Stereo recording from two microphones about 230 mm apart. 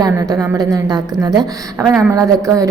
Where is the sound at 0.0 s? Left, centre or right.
Centre.